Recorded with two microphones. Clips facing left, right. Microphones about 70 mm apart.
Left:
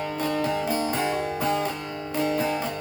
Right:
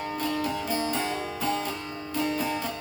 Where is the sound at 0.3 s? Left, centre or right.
Left.